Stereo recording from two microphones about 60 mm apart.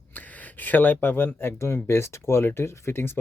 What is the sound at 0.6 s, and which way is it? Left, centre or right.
Speech, left.